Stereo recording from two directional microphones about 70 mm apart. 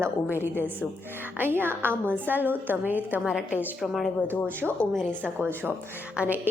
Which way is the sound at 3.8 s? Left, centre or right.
Centre.